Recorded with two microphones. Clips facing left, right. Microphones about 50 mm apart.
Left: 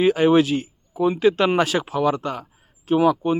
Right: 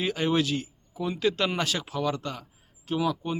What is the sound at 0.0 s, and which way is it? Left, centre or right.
Speech, left.